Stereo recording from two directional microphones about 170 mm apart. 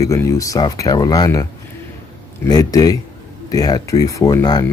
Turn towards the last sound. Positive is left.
turn(degrees=25)  # may be behind; listen again after turning